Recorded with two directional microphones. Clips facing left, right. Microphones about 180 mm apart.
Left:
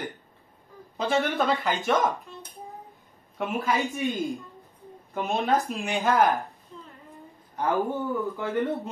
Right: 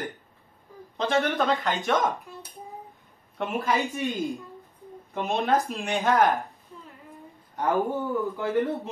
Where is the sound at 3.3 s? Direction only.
Centre (ahead or behind).